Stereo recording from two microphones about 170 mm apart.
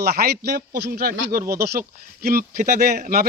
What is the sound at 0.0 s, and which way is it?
Speech, 70° right (ahead or behind).